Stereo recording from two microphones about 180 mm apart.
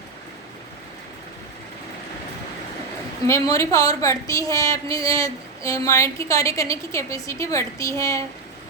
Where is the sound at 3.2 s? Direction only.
15° left (ahead or behind).